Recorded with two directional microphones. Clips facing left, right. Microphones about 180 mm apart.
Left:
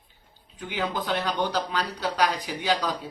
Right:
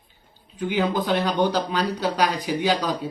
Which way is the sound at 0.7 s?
15° right (ahead or behind).